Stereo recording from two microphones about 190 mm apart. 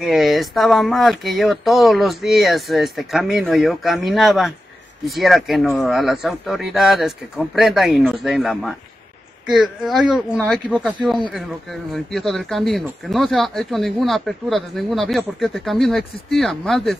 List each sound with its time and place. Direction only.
0.0 s speech: centre (ahead or behind)